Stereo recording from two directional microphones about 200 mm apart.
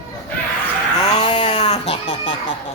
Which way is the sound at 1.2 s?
35° left (ahead or behind).